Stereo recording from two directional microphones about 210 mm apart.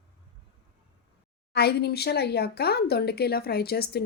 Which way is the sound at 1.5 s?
50° left (ahead or behind).